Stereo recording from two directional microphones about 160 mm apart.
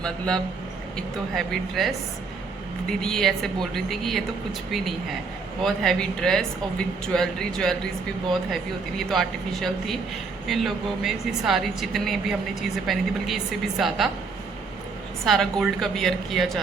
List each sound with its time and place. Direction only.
0.0 s a woman's voice: 5° left (ahead or behind)
3.0 s a woman's voice: 5° left (ahead or behind)
9.0 s a woman's voice: centre (ahead or behind)
15.2 s a woman's voice: centre (ahead or behind)